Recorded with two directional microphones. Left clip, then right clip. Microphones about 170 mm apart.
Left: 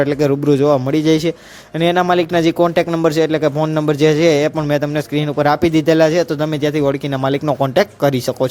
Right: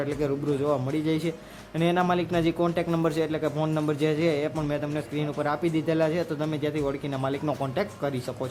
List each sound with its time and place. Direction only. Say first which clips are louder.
0.0 s speech: left 13 dB; 45° left (ahead or behind)